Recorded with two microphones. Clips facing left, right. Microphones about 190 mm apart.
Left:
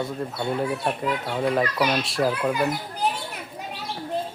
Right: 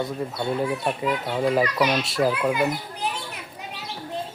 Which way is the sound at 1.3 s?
5° right (ahead or behind).